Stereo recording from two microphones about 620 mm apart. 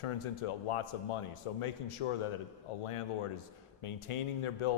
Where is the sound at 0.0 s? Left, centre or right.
Left.